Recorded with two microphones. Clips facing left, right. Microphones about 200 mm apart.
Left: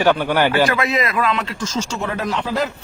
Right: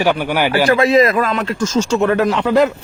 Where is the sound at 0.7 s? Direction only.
35° right (ahead or behind).